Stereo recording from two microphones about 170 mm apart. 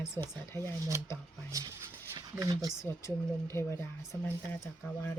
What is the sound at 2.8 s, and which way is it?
Speech, 15° left (ahead or behind).